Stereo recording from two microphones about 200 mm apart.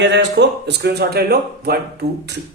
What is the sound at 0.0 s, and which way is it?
Speech, 60° right (ahead or behind).